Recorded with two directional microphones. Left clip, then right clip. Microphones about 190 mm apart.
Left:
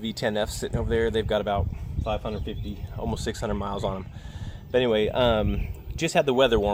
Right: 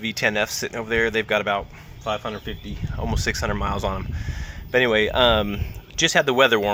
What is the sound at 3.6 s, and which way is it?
Speech, 40° right (ahead or behind).